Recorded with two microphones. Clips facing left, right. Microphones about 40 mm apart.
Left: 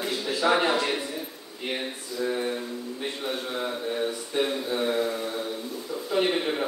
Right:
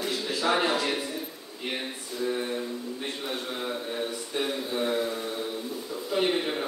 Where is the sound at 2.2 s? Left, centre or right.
Centre.